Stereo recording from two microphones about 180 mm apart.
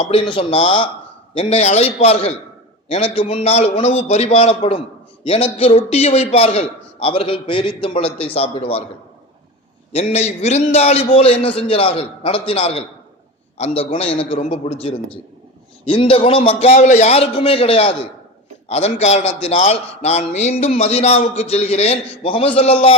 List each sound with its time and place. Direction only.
0.0 s a man's voice: 30° left (ahead or behind)
9.9 s a man's voice: 35° left (ahead or behind)